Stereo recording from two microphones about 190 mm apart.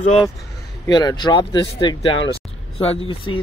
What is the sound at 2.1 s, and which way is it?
Speech, 75° left (ahead or behind).